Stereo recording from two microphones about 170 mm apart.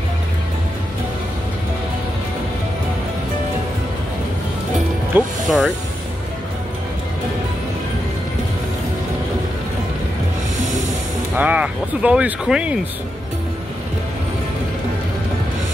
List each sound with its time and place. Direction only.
5.1 s speech: centre (ahead or behind)
11.3 s speech: 10° right (ahead or behind)